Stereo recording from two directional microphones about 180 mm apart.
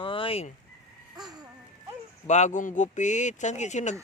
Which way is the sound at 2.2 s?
40° left (ahead or behind).